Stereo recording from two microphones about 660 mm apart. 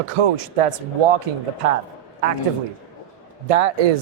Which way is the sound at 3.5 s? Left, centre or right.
Right.